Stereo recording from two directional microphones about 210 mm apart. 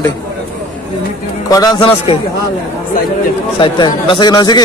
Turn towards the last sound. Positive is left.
turn(degrees=20)  # may be behind; listen again after turning